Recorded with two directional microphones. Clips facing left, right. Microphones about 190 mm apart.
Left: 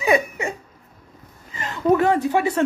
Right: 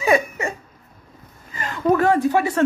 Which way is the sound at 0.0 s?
15° left (ahead or behind).